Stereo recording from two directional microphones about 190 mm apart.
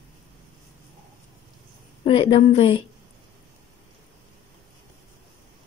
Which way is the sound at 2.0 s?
30° left (ahead or behind).